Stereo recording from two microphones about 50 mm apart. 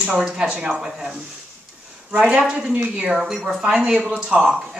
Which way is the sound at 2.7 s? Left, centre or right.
Right.